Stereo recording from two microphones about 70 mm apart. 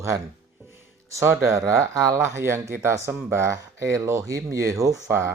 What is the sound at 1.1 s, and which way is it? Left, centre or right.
Speech, right.